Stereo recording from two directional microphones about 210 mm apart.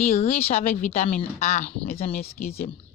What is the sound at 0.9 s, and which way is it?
Speech, 40° left (ahead or behind).